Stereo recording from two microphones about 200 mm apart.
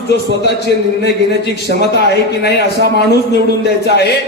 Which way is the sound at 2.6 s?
55° right (ahead or behind).